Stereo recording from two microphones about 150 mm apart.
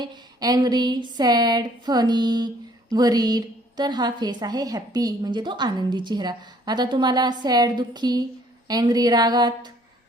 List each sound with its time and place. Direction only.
0.0 s a woman's voice: 30° right (ahead or behind)